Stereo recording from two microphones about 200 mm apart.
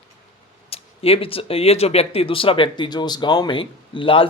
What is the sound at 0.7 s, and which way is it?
Speech, 30° left (ahead or behind).